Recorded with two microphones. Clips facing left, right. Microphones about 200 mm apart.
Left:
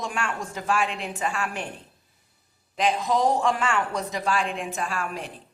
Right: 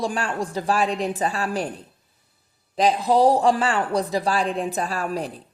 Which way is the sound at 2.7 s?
35° right (ahead or behind).